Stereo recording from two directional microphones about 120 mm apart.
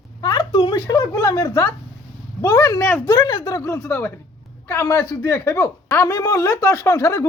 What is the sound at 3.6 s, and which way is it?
A woman's voice, 25° left (ahead or behind).